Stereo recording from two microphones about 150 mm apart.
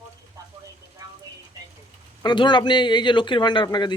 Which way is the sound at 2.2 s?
30° left (ahead or behind).